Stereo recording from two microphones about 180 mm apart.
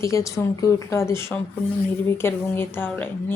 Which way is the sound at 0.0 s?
15° left (ahead or behind).